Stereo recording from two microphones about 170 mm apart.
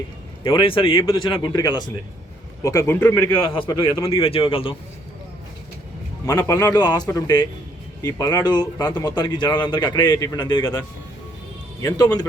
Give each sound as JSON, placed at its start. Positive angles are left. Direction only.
{"t": 0.4, "sound": "a man's voice", "side_deg": 30}
{"t": 3.5, "sound": "speech", "side_deg": 30}
{"t": 6.5, "sound": "speech", "side_deg": 20}